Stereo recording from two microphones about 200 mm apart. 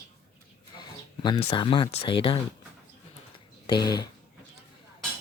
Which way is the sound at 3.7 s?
20° left (ahead or behind).